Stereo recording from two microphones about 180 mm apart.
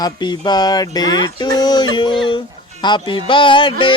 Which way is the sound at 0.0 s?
25° left (ahead or behind).